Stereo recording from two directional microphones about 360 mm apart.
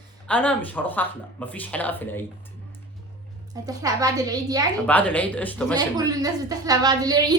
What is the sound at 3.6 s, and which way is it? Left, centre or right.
A woman's voice, centre.